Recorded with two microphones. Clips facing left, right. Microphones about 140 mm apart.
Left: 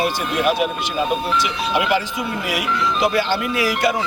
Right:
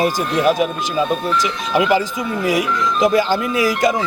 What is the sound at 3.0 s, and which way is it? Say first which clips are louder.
Speech: right 5 dB; 40° right (ahead or behind).